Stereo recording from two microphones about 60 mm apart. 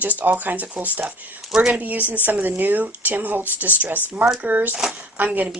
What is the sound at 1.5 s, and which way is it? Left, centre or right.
Speech, centre.